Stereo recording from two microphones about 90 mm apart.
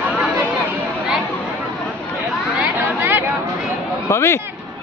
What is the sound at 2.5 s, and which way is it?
Chatter, 20° right (ahead or behind).